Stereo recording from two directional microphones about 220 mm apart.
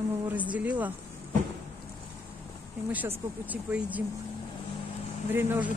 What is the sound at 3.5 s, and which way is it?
Speech, 5° right (ahead or behind).